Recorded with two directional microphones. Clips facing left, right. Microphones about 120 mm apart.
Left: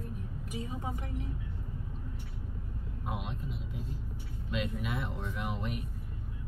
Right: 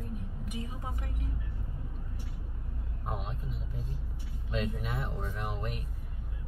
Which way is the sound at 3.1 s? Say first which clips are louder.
Even; 40° right (ahead or behind).